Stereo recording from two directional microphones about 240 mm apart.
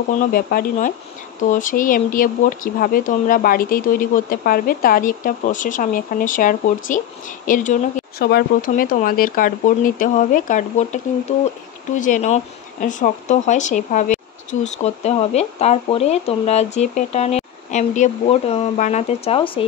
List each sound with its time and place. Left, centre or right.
0.1 s speech: left